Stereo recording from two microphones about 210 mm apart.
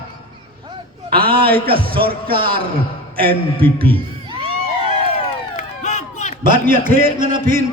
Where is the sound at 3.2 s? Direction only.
25° right (ahead or behind).